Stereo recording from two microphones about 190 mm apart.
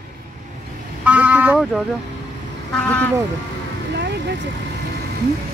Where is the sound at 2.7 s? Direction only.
5° left (ahead or behind).